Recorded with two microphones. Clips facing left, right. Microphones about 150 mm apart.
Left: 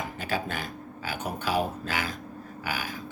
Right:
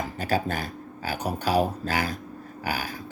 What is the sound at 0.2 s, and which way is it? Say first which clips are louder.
Speech: right 6 dB; 40° right (ahead or behind).